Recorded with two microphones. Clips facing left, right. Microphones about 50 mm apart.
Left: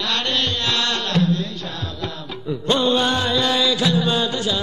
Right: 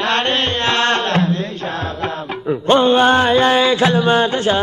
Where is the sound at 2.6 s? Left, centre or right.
Right.